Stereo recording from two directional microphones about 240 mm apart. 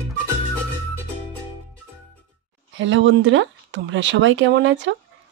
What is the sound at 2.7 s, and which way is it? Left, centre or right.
Speech, right.